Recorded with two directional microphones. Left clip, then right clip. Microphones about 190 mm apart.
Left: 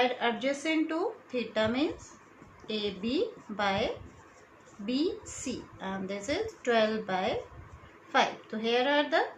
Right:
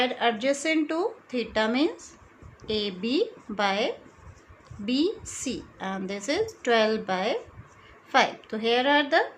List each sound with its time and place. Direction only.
0.0 s a woman's voice: 50° right (ahead or behind)
4.9 s a woman's voice: 50° right (ahead or behind)